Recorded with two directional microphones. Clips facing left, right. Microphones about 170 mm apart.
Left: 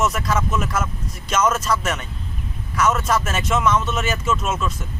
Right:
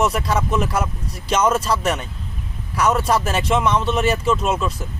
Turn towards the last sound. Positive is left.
turn(degrees=-35)  # may be behind; listen again after turning